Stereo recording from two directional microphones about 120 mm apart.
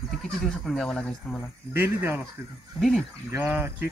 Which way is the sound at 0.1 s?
Centre (ahead or behind).